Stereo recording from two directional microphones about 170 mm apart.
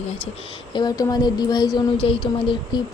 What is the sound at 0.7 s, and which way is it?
Speech, 20° left (ahead or behind).